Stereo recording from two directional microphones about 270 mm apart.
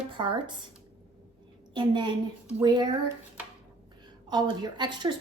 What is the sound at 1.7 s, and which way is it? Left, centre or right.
A woman's voice, centre.